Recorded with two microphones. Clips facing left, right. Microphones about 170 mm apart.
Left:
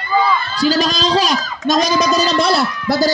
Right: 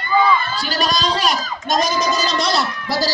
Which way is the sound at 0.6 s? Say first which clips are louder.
Left 7 dB; 90° left.